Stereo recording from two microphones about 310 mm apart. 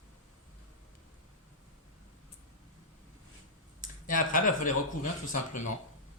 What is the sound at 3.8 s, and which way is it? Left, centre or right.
Speech, left.